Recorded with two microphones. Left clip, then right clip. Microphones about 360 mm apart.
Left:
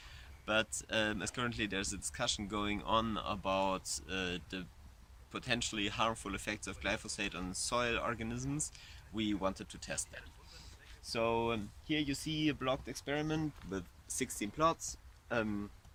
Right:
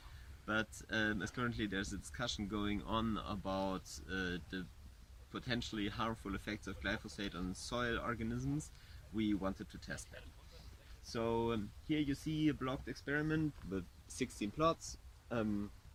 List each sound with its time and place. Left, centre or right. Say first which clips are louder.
0.4 s speech: left 5 dB; centre
11.0 s speech: left 4 dB; centre; by 15.4 s left